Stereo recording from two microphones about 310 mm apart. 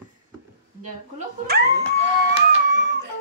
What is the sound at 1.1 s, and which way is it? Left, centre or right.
Music, right.